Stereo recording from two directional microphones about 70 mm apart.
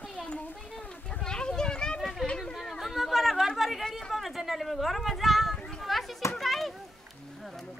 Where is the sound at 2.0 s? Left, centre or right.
Centre.